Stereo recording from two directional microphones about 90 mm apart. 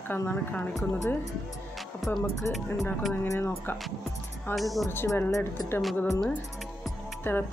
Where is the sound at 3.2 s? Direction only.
25° left (ahead or behind).